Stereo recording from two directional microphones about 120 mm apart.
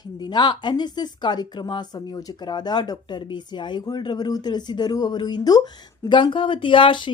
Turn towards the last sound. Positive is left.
turn(degrees=40)  # may be behind; listen again after turning